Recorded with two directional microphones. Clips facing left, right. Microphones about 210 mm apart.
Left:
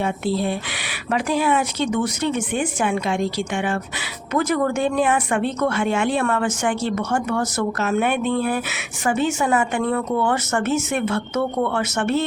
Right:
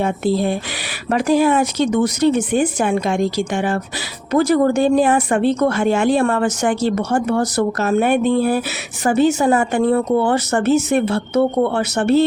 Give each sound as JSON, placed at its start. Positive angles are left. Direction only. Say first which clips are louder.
{"t": 0.0, "sound": "speech", "louder": "right 4 dB", "side_deg": -45}